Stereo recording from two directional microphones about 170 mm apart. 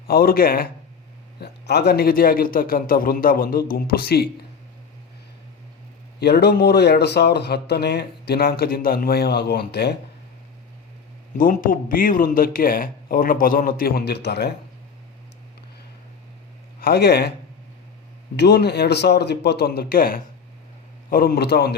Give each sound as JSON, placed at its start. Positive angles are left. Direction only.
{"t": 0.1, "sound": "speech", "side_deg": 60}
{"t": 1.4, "sound": "speech", "side_deg": 75}
{"t": 6.1, "sound": "speech", "side_deg": 75}
{"t": 11.3, "sound": "speech", "side_deg": 55}
{"t": 16.8, "sound": "speech", "side_deg": 70}
{"t": 18.3, "sound": "speech", "side_deg": 75}